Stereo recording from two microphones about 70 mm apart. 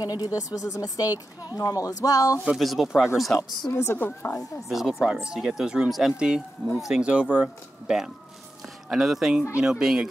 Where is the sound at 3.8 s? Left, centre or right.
Left.